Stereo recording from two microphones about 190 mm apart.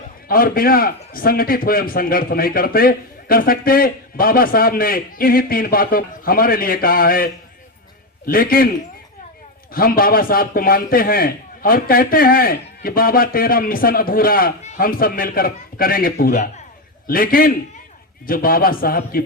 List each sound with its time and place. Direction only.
0.3 s a man's voice: 50° left (ahead or behind)
8.3 s a man's voice: 50° left (ahead or behind)
9.7 s a man's voice: 50° left (ahead or behind)